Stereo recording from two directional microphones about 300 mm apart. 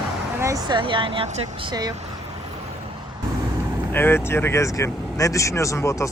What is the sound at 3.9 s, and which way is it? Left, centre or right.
Speech, centre.